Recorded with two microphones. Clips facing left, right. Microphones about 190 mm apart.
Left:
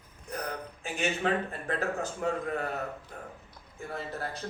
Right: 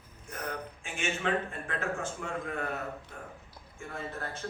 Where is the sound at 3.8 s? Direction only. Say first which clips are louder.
Left 4 dB; 35° left (ahead or behind).